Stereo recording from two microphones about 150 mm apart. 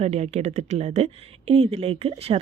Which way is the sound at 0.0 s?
45° right (ahead or behind).